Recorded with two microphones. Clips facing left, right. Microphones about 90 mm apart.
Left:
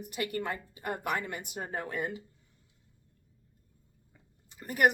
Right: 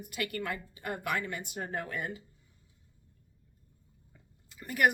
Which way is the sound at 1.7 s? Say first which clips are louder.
Left 3 dB; 30° left (ahead or behind).